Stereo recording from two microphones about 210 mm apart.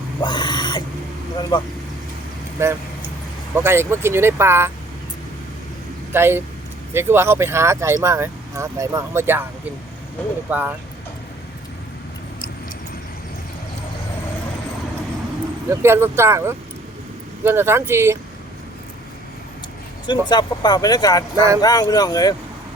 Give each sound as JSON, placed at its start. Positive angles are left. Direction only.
{"t": 0.2, "sound": "a sound", "side_deg": 20}
{"t": 1.4, "sound": "speech", "side_deg": 20}
{"t": 2.6, "sound": "speech", "side_deg": -10}
{"t": 6.1, "sound": "speech", "side_deg": -10}
{"t": 10.5, "sound": "speech", "side_deg": -10}
{"t": 15.7, "sound": "speech", "side_deg": -10}
{"t": 20.1, "sound": "speech", "side_deg": 20}